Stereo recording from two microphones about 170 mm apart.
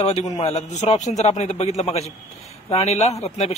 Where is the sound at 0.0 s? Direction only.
40° left (ahead or behind).